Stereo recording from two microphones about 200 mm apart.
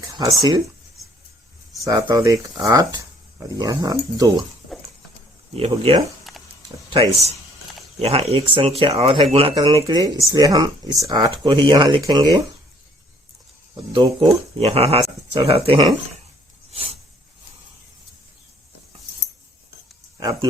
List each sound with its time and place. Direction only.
1.8 s speech: 15° right (ahead or behind)
5.5 s speech: 30° right (ahead or behind)
13.7 s speech: 25° right (ahead or behind)
16.7 s a sound: 30° right (ahead or behind)
20.1 s speech: 20° right (ahead or behind)